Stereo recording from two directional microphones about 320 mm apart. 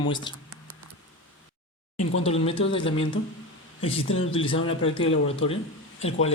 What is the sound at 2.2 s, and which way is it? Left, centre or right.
Speech, centre.